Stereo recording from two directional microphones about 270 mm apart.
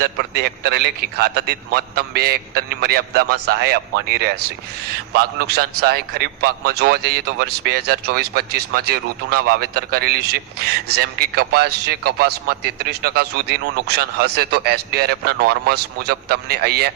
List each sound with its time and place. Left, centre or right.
0.0 s speech: right